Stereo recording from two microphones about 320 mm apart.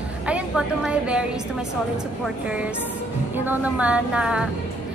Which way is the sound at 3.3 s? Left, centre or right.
Centre.